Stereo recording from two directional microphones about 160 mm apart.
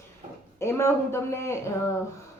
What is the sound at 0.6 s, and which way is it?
Speech, 15° left (ahead or behind).